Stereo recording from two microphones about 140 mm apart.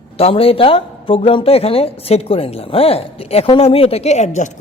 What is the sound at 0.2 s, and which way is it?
Speech, 45° left (ahead or behind).